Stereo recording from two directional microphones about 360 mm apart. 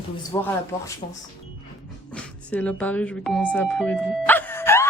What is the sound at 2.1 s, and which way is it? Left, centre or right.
Speech, centre.